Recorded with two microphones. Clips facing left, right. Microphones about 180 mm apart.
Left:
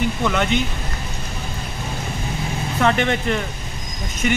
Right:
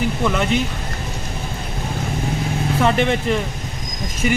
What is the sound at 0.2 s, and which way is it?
Speech, 5° right (ahead or behind).